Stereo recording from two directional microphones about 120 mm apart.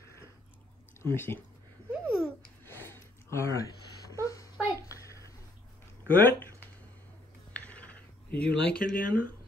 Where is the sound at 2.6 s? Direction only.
20° left (ahead or behind).